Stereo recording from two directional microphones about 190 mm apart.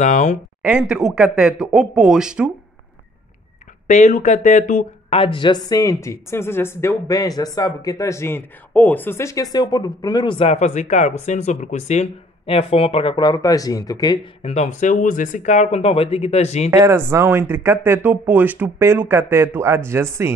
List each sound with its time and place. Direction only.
0.0 s speech: 40° left (ahead or behind)
0.6 s speech: 5° right (ahead or behind)
3.8 s speech: 40° left (ahead or behind); by 14.2 s 20° left (ahead or behind)
14.4 s speech: 35° left (ahead or behind)
16.7 s speech: 15° right (ahead or behind)